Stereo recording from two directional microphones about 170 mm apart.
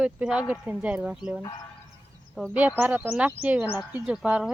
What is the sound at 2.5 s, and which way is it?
Speech, 10° right (ahead or behind).